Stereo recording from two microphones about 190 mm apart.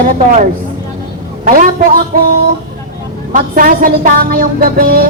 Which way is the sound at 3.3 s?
45° right (ahead or behind).